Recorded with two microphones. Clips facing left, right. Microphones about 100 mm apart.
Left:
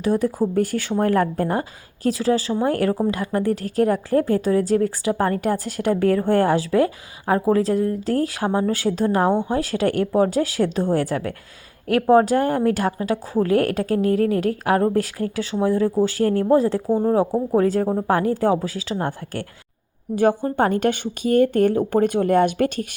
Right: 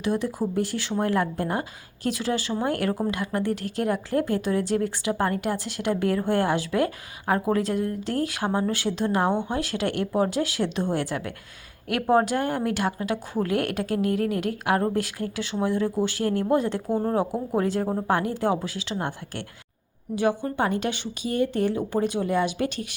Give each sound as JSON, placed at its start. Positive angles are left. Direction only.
{"t": 0.0, "sound": "a woman's voice", "side_deg": 40}
{"t": 16.9, "sound": "speech", "side_deg": 20}
{"t": 17.2, "sound": "a woman's voice", "side_deg": 35}